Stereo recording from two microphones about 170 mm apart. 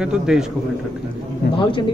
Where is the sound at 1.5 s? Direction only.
30° left (ahead or behind).